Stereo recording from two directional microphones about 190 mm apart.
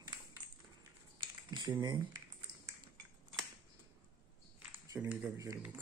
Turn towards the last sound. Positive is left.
turn(degrees=-15)  # may be behind; listen again after turning